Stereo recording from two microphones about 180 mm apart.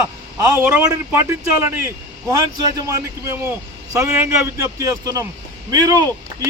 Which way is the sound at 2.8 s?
15° right (ahead or behind).